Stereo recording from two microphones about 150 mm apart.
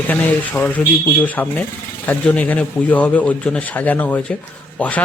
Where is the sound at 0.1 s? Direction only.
15° left (ahead or behind).